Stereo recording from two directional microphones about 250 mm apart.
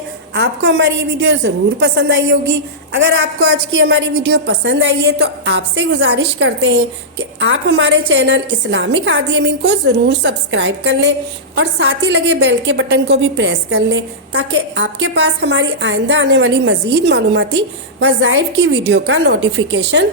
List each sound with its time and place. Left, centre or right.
0.3 s a woman's voice: right